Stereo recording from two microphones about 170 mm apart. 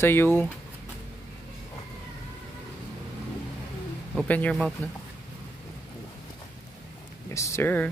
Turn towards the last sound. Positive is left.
turn(degrees=15)  # may be behind; listen again after turning